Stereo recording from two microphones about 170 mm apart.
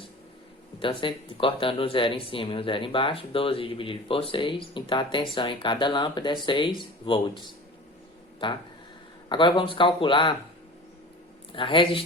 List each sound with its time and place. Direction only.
0.8 s speech: 30° left (ahead or behind)
11.5 s speech: 30° left (ahead or behind)